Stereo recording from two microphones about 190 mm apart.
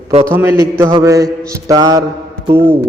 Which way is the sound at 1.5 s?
20° right (ahead or behind).